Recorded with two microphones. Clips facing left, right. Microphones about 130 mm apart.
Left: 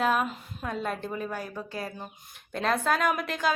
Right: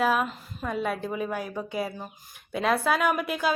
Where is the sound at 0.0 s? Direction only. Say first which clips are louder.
Right 1 dB; centre (ahead or behind).